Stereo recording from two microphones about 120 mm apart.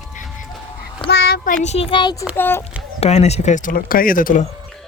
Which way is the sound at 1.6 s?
65° left (ahead or behind).